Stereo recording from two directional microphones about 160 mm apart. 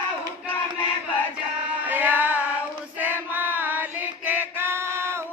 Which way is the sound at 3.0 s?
10° right (ahead or behind).